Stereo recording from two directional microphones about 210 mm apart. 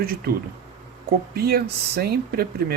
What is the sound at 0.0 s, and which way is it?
Speech, 45° right (ahead or behind).